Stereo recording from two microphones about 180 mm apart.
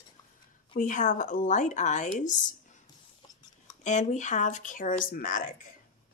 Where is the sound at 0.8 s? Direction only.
45° left (ahead or behind).